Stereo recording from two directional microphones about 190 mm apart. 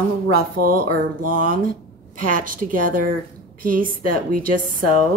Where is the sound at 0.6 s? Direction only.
50° right (ahead or behind).